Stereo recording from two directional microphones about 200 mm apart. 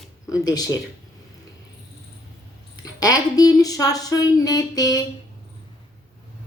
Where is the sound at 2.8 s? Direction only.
20° left (ahead or behind).